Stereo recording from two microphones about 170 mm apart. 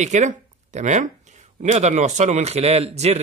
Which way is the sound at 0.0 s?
45° right (ahead or behind).